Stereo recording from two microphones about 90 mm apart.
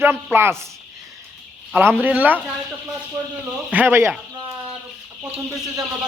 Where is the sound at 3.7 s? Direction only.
15° right (ahead or behind).